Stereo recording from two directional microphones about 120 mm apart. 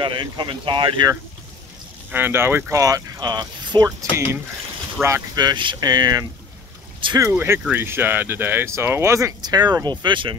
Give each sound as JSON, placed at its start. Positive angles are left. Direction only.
{"t": 0.0, "sound": "speech", "side_deg": -45}
{"t": 2.0, "sound": "speech", "side_deg": -15}
{"t": 4.0, "sound": "speech", "side_deg": -25}
{"t": 7.0, "sound": "speech", "side_deg": -45}
{"t": 7.3, "sound": "speech", "side_deg": -20}